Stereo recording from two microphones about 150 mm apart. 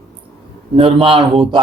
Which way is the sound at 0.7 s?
35° right (ahead or behind).